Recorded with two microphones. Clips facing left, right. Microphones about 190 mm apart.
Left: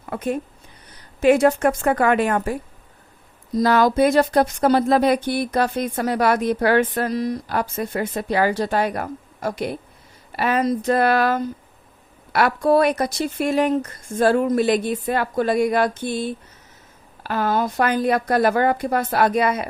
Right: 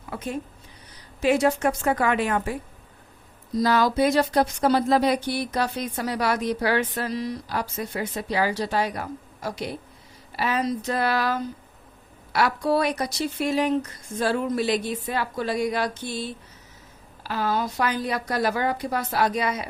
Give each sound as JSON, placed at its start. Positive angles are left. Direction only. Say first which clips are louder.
{"t": 0.0, "sound": "a sound", "louder": "left 7 dB", "side_deg": 55}
{"t": 1.2, "sound": "speech", "louder": "left 5 dB", "side_deg": 55}
{"t": 3.6, "sound": "a woman's voice", "louder": "left 4 dB", "side_deg": 55}